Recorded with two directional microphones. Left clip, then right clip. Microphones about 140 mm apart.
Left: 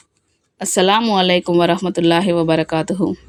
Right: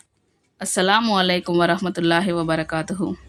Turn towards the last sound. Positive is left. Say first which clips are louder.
# left 6 dB
turn(degrees=20)  # may be behind; listen again after turning